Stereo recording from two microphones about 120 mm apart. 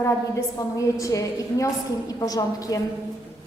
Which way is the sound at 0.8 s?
30° left (ahead or behind).